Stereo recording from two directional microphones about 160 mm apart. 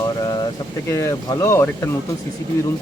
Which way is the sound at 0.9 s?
20° left (ahead or behind).